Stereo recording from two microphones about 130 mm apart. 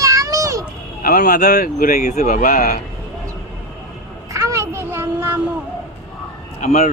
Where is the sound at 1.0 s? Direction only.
90° left.